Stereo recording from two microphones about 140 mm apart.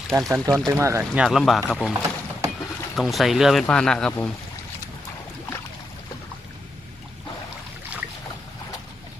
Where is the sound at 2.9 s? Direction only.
Centre (ahead or behind).